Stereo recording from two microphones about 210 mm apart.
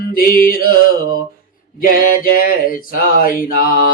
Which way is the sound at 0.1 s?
45° left (ahead or behind).